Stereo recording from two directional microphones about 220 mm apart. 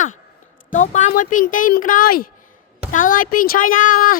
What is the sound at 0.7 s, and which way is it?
Speech, 35° left (ahead or behind).